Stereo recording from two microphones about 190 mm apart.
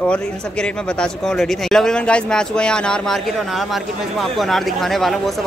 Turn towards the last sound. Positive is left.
turn(degrees=0)  # may be behind; listen again after turning